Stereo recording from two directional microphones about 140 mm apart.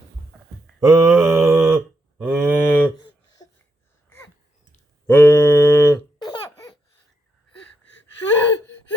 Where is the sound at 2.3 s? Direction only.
Centre (ahead or behind).